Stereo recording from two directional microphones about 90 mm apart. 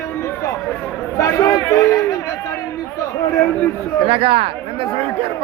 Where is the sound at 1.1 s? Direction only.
40° left (ahead or behind).